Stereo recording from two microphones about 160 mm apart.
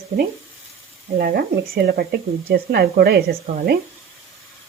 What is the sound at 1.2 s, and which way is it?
Speech, 70° right (ahead or behind).